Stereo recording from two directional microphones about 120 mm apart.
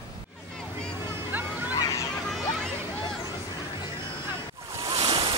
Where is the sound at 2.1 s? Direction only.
5° left (ahead or behind).